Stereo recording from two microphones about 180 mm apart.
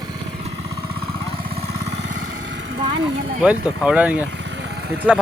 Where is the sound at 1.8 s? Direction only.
70° right (ahead or behind).